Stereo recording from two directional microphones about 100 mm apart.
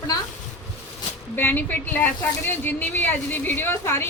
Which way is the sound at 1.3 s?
20° left (ahead or behind).